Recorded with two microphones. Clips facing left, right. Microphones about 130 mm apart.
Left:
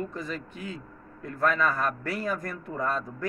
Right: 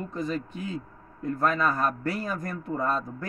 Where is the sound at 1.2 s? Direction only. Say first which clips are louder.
Right 1 dB; 35° right (ahead or behind).